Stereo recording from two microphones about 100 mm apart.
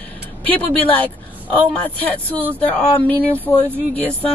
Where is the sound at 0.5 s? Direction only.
15° left (ahead or behind).